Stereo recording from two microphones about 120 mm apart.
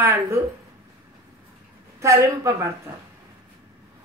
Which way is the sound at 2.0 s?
25° right (ahead or behind).